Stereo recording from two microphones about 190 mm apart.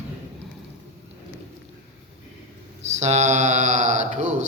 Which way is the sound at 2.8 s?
35° right (ahead or behind).